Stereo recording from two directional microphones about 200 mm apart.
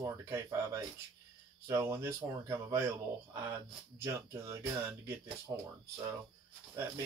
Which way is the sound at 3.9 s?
15° right (ahead or behind).